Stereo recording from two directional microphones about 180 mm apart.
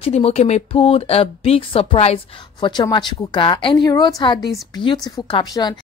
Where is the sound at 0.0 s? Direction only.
35° left (ahead or behind).